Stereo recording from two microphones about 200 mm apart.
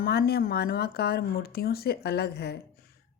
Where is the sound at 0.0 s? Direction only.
50° left (ahead or behind).